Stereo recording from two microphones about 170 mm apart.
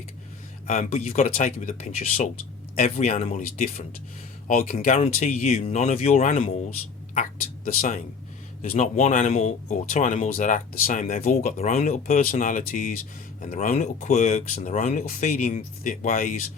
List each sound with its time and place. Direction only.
0.7 s speech: 40° left (ahead or behind)
4.9 s speech: 40° left (ahead or behind)
7.8 s speech: 50° left (ahead or behind)